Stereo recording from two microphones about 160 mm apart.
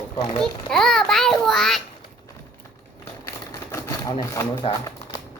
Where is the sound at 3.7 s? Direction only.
20° left (ahead or behind).